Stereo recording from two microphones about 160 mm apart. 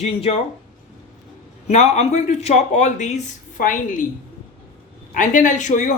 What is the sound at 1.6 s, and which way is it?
Speech, 45° left (ahead or behind).